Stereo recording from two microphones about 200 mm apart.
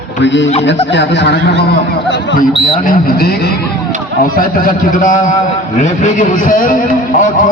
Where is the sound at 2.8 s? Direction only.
45° left (ahead or behind).